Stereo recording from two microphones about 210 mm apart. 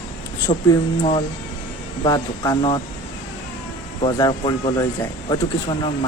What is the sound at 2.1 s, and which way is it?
Speech, 20° left (ahead or behind).